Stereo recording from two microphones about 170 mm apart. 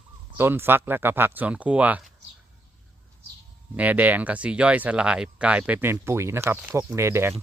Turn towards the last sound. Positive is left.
turn(degrees=-15)  # may be behind; listen again after turning